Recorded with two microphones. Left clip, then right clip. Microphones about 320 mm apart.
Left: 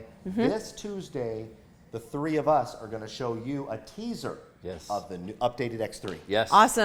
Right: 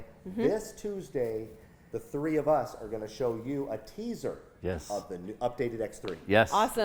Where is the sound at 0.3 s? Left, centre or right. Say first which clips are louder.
Left 1 dB; centre.